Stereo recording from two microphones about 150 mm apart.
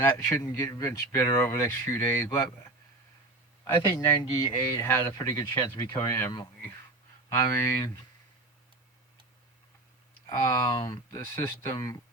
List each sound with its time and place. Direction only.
0.0 s speech: 15° left (ahead or behind)
10.2 s speech: 25° left (ahead or behind)